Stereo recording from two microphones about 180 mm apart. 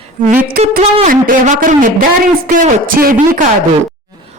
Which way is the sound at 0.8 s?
45° right (ahead or behind).